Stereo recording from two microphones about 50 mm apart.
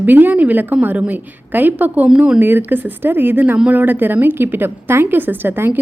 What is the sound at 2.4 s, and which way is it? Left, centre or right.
A woman's voice, right.